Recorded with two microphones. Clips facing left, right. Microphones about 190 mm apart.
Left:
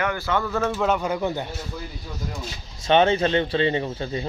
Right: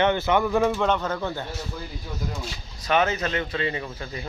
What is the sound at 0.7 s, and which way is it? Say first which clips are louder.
Speech: left 1 dB; 5° left (ahead or behind).